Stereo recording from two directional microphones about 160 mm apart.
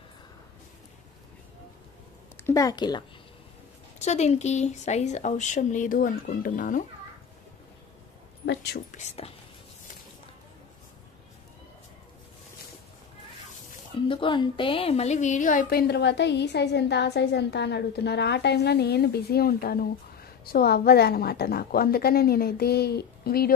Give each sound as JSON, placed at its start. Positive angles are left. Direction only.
{"t": 2.4, "sound": "speech", "side_deg": 20}
{"t": 4.0, "sound": "speech", "side_deg": 45}
{"t": 8.5, "sound": "a woman's voice", "side_deg": 90}
{"t": 8.9, "sound": "speech", "side_deg": 40}
{"t": 13.9, "sound": "speech", "side_deg": 30}
{"t": 15.9, "sound": "a woman's voice", "side_deg": 90}